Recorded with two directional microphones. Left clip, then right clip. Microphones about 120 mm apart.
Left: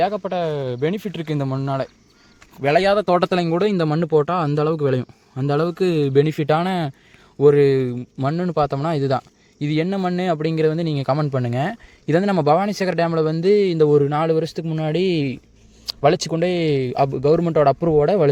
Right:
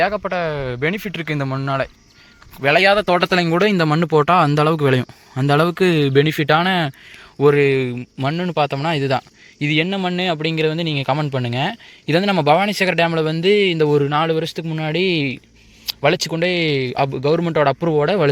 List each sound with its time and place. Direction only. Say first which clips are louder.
0.0 s a man's voice: right 2 dB; 25° left (ahead or behind)
0.3 s a man's voice: right 1 dB; 35° left (ahead or behind)
3.2 s speech: right 3 dB; 15° left (ahead or behind)
3.5 s speech: right 3 dB; centre (ahead or behind)
7.6 s speech: even; 35° left (ahead or behind)
7.9 s a man's voice: right 1 dB; 25° left (ahead or behind)
14.3 s a man's voice: even; 35° left (ahead or behind)